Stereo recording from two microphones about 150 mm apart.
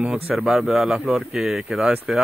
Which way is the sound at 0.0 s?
5° right (ahead or behind).